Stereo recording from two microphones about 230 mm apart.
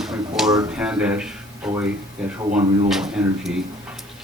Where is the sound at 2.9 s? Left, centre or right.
Centre.